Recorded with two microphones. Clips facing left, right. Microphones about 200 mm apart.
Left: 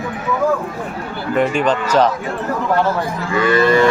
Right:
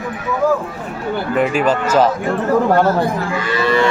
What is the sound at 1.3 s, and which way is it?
Speech, 5° right (ahead or behind).